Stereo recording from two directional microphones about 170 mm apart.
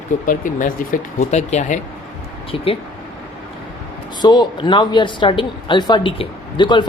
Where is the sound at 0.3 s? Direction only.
50° left (ahead or behind).